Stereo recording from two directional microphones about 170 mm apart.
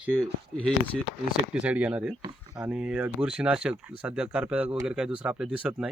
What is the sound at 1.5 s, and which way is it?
Speech, 10° right (ahead or behind).